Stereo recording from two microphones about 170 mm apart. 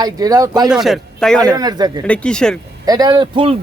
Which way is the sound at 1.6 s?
25° right (ahead or behind).